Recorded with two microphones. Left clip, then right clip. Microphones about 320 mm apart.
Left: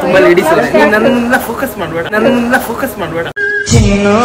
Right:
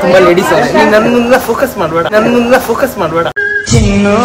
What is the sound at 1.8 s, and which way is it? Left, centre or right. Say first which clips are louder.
Speech: right 3 dB; centre.